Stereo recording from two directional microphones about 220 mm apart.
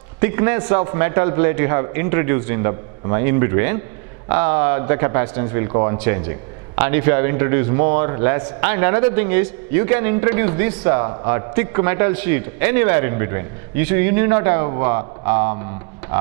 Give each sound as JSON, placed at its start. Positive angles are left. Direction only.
{"t": 0.2, "sound": "a man's voice", "side_deg": -15}